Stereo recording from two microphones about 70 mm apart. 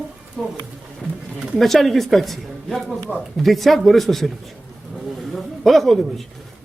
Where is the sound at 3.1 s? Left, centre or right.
Right.